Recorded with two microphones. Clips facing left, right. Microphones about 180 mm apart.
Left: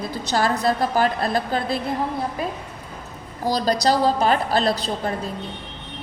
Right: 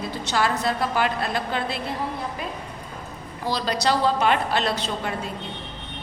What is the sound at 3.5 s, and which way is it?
A woman's voice, 40° left (ahead or behind).